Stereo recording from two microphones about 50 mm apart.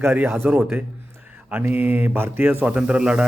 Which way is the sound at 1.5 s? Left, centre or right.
Right.